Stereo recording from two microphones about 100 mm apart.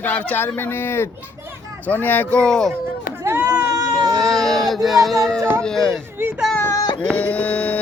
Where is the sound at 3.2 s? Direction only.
25° right (ahead or behind).